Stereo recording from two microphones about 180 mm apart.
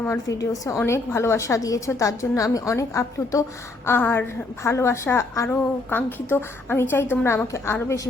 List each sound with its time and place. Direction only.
0.0 s a woman's voice: 15° left (ahead or behind)